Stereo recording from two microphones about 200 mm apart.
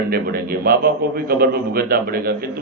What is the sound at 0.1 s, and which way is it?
A man's voice, 50° right (ahead or behind).